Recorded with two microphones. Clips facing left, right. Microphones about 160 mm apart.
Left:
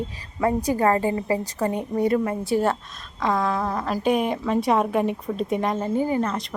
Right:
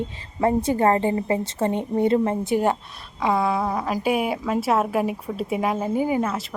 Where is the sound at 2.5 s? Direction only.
15° right (ahead or behind).